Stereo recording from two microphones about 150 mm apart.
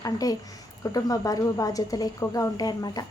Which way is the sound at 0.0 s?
25° left (ahead or behind).